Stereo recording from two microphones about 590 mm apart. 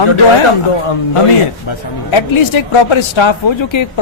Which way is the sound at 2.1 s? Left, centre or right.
Left.